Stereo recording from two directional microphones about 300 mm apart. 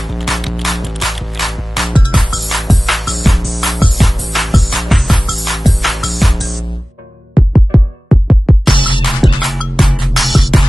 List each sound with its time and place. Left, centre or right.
0.0 s mechanisms: centre
7.3 s music: centre
8.7 s music: centre
9.0 s music: centre